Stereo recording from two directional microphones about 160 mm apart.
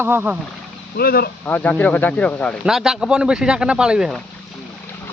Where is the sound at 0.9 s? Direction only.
75° left (ahead or behind).